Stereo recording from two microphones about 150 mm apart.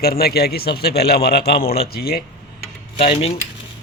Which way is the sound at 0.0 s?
90° left.